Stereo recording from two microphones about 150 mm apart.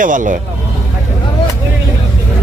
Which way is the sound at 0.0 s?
60° right (ahead or behind).